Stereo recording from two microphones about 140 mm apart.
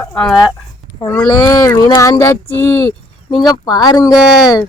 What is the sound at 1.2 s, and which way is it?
Speech, 25° left (ahead or behind).